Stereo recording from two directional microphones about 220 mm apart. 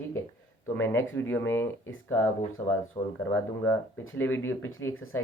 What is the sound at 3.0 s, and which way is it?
Speech, 20° left (ahead or behind).